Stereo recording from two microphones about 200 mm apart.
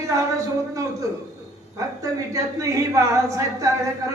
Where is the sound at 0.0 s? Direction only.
15° right (ahead or behind).